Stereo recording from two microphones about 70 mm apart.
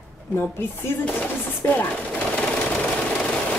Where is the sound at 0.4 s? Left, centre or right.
Left.